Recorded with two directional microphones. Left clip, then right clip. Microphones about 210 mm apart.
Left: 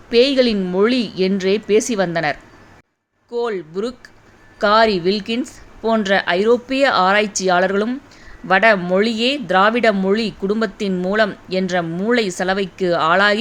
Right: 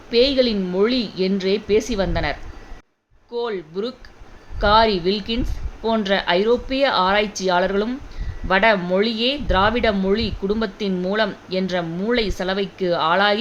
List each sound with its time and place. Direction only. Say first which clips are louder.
0.1 s speech: left 3 dB; 15° left (ahead or behind)